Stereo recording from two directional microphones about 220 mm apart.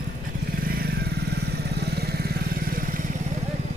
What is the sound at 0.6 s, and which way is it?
Vehicle, 45° right (ahead or behind).